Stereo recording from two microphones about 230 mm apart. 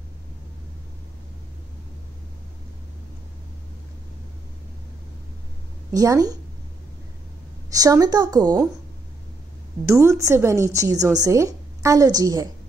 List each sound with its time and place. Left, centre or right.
5.9 s a woman's voice: centre
7.7 s a woman's voice: centre
9.8 s a woman's voice: centre